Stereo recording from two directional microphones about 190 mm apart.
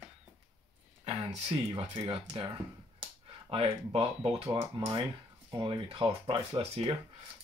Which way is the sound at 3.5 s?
30° right (ahead or behind).